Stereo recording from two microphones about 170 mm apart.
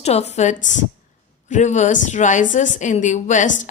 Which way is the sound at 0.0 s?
40° left (ahead or behind).